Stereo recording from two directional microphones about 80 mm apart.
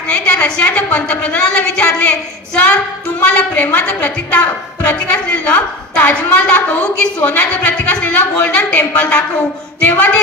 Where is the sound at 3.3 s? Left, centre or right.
Centre.